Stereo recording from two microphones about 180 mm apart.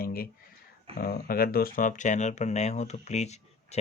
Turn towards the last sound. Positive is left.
turn(degrees=40)  # may be behind; listen again after turning